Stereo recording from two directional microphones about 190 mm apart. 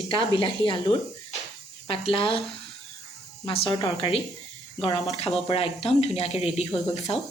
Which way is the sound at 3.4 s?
30° left (ahead or behind).